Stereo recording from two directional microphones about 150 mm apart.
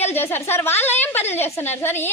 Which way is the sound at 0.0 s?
15° left (ahead or behind).